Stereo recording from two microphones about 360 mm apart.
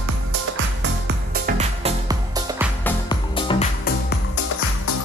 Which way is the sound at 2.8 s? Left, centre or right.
Centre.